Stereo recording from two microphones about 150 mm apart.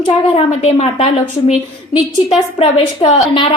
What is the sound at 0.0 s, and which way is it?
A woman's voice, 45° left (ahead or behind).